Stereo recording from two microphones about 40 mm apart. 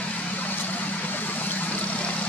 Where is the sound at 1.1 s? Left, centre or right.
Left.